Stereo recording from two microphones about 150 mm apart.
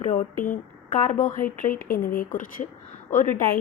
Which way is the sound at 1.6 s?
70° left (ahead or behind).